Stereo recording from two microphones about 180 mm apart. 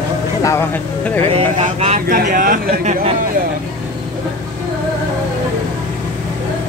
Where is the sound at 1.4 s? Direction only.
35° right (ahead or behind).